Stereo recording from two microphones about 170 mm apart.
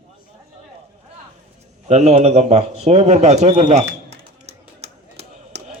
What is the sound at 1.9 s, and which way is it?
A man's voice, 40° right (ahead or behind).